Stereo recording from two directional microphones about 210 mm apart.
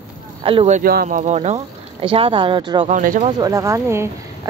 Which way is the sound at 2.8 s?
35° right (ahead or behind).